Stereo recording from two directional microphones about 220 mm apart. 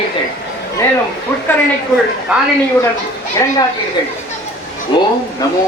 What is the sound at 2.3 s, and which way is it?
Speech, 5° right (ahead or behind).